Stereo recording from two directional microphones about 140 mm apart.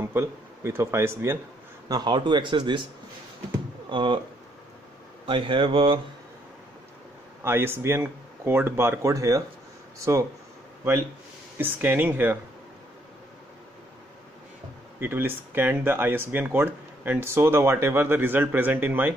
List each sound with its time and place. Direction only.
0.0 s speech: 20° right (ahead or behind)
1.9 s speech: 30° right (ahead or behind)
3.9 s speech: 35° right (ahead or behind)
5.2 s speech: 35° right (ahead or behind)
7.4 s speech: 15° right (ahead or behind)
11.5 s speech: 15° right (ahead or behind)
15.0 s speech: 15° right (ahead or behind)